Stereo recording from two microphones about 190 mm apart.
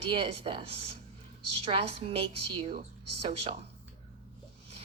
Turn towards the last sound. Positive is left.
turn(degrees=-30)  # may be behind; listen again after turning